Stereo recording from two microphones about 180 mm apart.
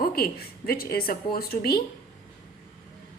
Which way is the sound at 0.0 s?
55° left (ahead or behind).